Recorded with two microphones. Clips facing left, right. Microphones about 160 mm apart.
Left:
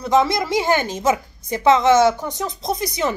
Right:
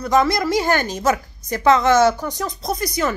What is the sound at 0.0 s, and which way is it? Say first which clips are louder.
A woman's voice: even; 25° left (ahead or behind).